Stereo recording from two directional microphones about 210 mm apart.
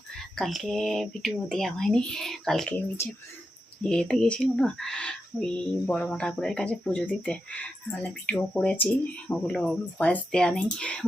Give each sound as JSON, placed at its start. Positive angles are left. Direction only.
{"t": 0.3, "sound": "speech", "side_deg": 0}